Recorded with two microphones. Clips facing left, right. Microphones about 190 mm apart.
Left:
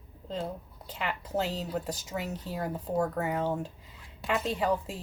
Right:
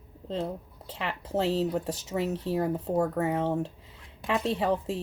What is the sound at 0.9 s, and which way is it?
Speech, 30° right (ahead or behind).